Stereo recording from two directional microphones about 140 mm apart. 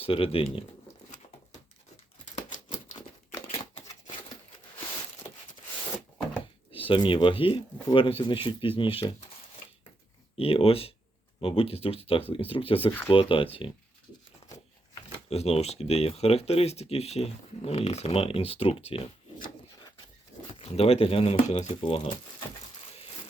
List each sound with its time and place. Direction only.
0.0 s speech: 40° left (ahead or behind)
6.7 s speech: 40° left (ahead or behind)
10.3 s speech: 45° left (ahead or behind)
15.3 s speech: 50° left (ahead or behind)
20.5 s speech: 45° left (ahead or behind)